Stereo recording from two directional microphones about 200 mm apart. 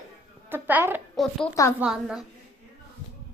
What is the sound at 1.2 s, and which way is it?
A woman's voice, centre (ahead or behind).